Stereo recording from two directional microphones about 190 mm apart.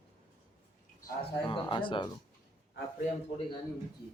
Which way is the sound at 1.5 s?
25° left (ahead or behind).